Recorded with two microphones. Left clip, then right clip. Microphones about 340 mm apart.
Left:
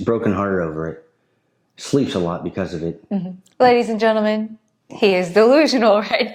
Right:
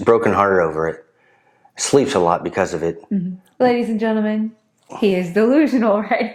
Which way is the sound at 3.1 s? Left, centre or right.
Left.